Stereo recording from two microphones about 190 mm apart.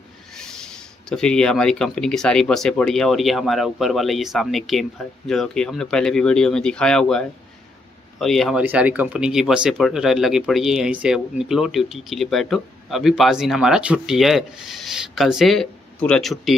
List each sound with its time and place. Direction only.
0.3 s speech: 5° left (ahead or behind)